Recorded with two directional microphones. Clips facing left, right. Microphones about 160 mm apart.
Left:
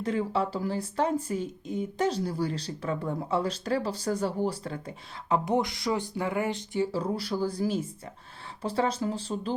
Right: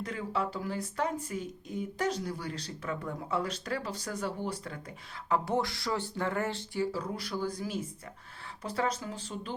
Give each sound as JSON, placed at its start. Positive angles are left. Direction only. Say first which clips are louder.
{"t": 0.0, "sound": "speech", "louder": "left 6 dB", "side_deg": 30}
{"t": 5.3, "sound": "speech", "louder": "left 3 dB", "side_deg": 20}
{"t": 6.9, "sound": "speech", "louder": "left 6 dB", "side_deg": 30}